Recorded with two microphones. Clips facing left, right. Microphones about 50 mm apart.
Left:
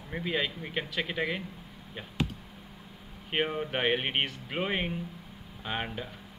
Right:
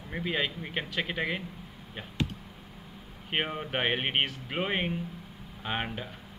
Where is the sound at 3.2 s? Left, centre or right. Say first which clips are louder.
Left 1 dB; centre.